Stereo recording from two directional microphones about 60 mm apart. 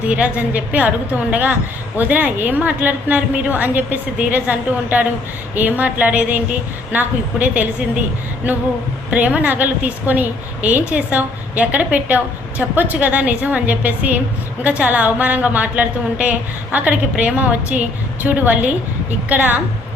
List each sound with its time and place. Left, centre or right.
0.1 s a woman's voice: right
9.0 s a woman's voice: right